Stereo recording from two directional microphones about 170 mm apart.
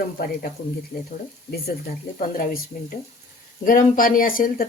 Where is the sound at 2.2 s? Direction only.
55° left (ahead or behind).